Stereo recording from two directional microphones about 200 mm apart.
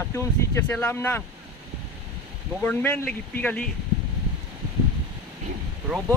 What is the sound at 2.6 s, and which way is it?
Speech, 10° left (ahead or behind).